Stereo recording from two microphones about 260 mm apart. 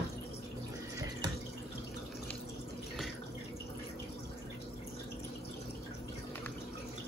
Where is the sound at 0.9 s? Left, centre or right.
Centre.